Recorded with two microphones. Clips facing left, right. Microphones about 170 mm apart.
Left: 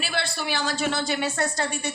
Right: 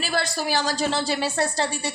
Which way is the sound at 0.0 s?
40° right (ahead or behind).